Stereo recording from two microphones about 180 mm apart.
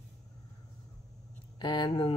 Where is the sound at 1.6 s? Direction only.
25° left (ahead or behind).